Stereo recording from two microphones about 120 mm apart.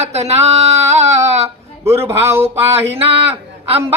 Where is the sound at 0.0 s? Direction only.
65° right (ahead or behind).